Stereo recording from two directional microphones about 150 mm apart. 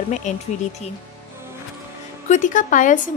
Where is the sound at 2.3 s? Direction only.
55° left (ahead or behind).